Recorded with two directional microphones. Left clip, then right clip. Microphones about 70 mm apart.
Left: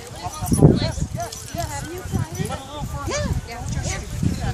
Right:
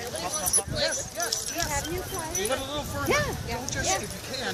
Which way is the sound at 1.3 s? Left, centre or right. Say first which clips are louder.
Right 1 dB; centre.